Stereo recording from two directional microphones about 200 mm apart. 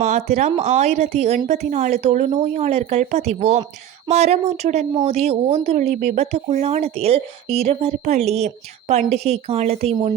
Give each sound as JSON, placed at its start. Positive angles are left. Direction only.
{"t": 0.0, "sound": "speech", "side_deg": -35}